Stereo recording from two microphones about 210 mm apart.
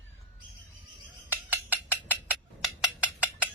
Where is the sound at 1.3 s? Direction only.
10° right (ahead or behind).